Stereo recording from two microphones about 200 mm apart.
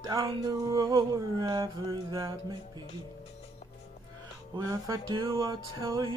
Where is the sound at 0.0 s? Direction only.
15° right (ahead or behind).